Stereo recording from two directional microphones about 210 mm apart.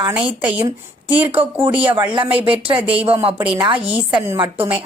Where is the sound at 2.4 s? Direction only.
25° right (ahead or behind).